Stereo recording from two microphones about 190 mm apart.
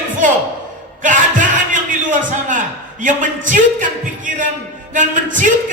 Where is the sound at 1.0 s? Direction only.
40° right (ahead or behind).